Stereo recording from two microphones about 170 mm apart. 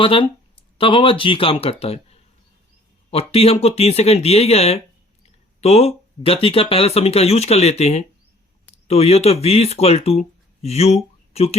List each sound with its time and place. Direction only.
0.0 s speech: 30° left (ahead or behind)